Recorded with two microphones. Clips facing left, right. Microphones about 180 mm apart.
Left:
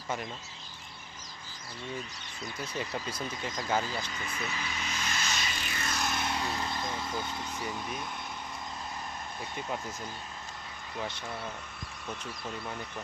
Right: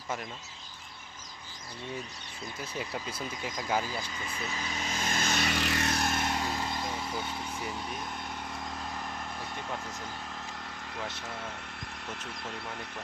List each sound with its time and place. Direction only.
2.6 s speech: 5° right (ahead or behind)
4.3 s vehicle: 30° right (ahead or behind)
6.6 s a sound: 10° right (ahead or behind)